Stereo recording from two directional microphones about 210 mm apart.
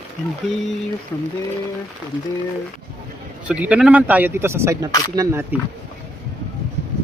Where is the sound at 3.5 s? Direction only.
5° right (ahead or behind).